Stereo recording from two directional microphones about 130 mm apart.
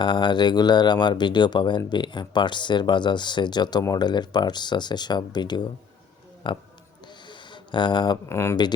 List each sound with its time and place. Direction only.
0.0 s speech: 40° left (ahead or behind)
7.3 s a sound: 35° left (ahead or behind)
8.3 s speech: 20° left (ahead or behind)